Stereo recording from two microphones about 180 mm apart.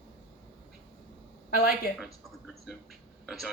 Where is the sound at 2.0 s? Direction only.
Centre (ahead or behind).